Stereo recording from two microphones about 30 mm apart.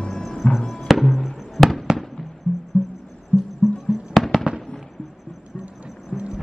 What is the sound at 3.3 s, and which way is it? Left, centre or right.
Music, left.